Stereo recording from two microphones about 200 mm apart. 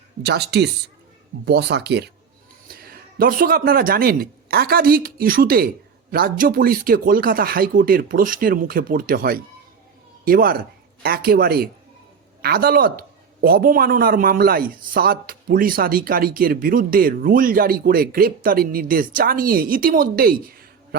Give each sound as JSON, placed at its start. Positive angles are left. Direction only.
{"t": 0.2, "sound": "a man's voice", "side_deg": -55}